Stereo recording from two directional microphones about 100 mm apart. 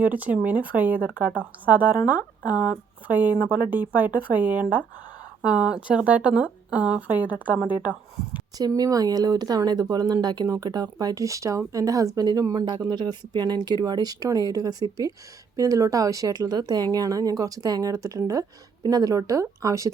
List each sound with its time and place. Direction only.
0.0 s a woman's voice: 15° right (ahead or behind)
8.5 s speech: 40° right (ahead or behind)